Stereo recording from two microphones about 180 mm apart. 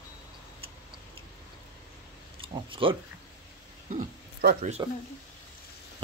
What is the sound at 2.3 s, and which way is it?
Speech, 30° right (ahead or behind).